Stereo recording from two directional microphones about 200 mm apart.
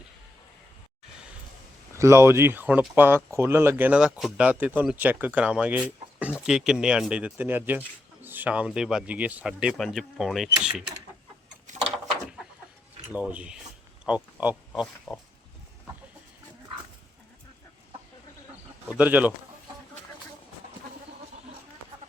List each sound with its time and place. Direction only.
2.0 s speech: 15° right (ahead or behind)
11.7 s a sound: 40° right (ahead or behind)
13.1 s speech: 5° right (ahead or behind)
18.9 s speech: 5° right (ahead or behind)